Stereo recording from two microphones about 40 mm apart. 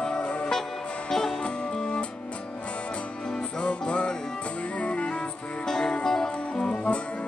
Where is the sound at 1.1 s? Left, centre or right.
Centre.